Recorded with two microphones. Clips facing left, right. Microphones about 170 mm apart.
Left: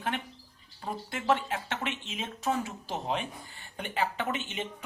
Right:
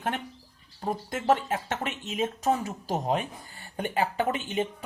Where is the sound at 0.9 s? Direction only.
40° right (ahead or behind).